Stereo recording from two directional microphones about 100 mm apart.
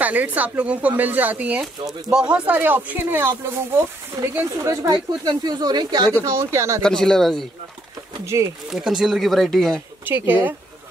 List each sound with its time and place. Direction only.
0.0 s speech: 15° right (ahead or behind)
4.8 s speech: 50° right (ahead or behind)
6.2 s speech: 30° right (ahead or behind)
6.8 s speech: 5° left (ahead or behind)
8.3 s speech: 30° right (ahead or behind)
8.7 s speech: 5° right (ahead or behind)
10.0 s speech: 20° right (ahead or behind)